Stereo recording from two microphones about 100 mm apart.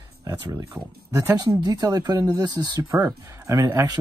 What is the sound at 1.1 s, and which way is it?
Speech, 35° right (ahead or behind).